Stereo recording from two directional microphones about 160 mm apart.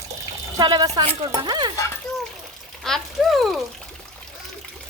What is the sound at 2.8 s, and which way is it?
Speech, centre (ahead or behind).